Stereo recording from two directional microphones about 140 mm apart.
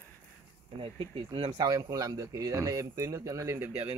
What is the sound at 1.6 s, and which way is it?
Speech, 25° right (ahead or behind).